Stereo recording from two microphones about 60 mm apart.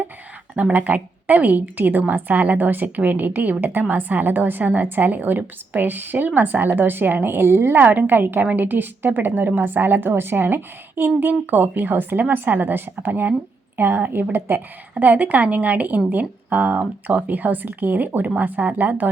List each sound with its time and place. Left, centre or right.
0.5 s a woman's voice: right